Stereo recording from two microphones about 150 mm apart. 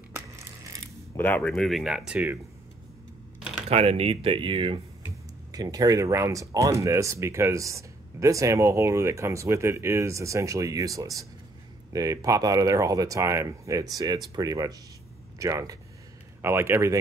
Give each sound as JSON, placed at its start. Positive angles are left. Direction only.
{"t": 1.1, "sound": "speech", "side_deg": 15}
{"t": 1.5, "sound": "speech", "side_deg": 0}
{"t": 3.6, "sound": "speech", "side_deg": -40}
{"t": 5.5, "sound": "speech", "side_deg": -25}